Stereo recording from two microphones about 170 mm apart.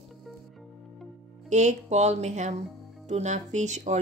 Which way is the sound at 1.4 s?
45° right (ahead or behind).